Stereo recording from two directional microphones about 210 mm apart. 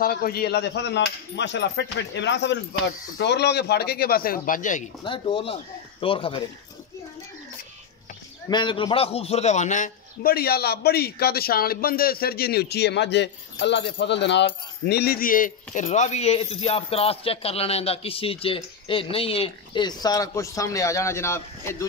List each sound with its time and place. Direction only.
0.0 s coin: 45° left (ahead or behind)
3.2 s speech: 55° left (ahead or behind); by 4.8 s 35° left (ahead or behind)
5.0 s speech: 25° left (ahead or behind)
8.5 s a man's voice: 20° left (ahead or behind)